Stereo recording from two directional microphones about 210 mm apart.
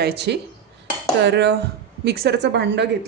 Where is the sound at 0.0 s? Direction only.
55° right (ahead or behind).